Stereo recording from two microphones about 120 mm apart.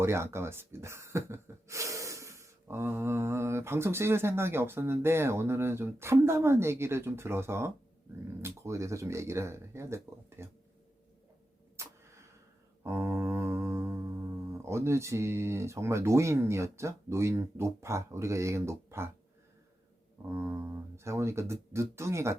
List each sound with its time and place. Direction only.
0.0 s speech: 20° right (ahead or behind)
11.8 s a sound: 25° right (ahead or behind)
12.8 s music: 20° right (ahead or behind)
14.5 s speech: 25° right (ahead or behind)
20.2 s speech: 20° right (ahead or behind)